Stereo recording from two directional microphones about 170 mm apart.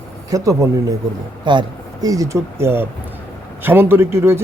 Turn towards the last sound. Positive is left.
turn(degrees=-15)  # may be behind; listen again after turning